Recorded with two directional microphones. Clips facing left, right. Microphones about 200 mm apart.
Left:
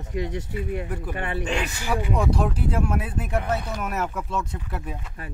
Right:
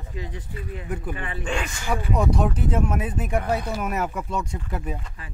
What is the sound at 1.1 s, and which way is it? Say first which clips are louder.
Speech: left 4 dB; 60° left (ahead or behind).